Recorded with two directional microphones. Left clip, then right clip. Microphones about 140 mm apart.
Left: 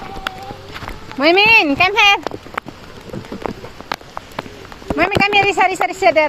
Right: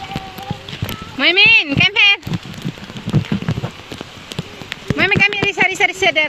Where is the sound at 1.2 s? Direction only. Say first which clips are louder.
Even; 50° right (ahead or behind).